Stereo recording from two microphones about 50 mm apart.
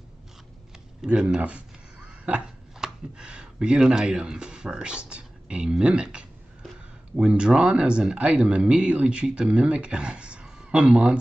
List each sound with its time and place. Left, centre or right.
1.0 s speech: centre
7.2 s speech: right